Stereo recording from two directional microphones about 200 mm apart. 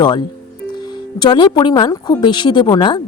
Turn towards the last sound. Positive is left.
turn(degrees=20)  # may be behind; listen again after turning